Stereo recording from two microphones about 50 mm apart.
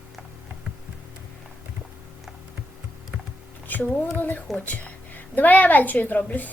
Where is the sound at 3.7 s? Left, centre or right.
Left.